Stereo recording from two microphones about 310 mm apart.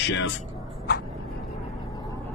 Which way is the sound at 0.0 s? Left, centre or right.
Left.